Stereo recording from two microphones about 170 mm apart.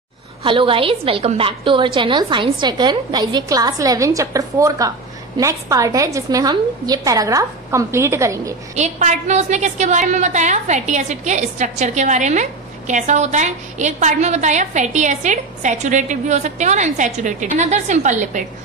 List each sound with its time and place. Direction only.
0.4 s a woman's voice: 30° right (ahead or behind)
8.7 s a woman's voice: 40° right (ahead or behind)